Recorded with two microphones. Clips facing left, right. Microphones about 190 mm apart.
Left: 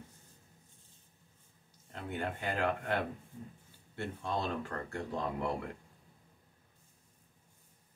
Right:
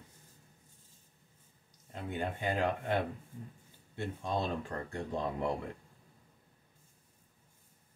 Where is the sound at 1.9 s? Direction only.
15° right (ahead or behind).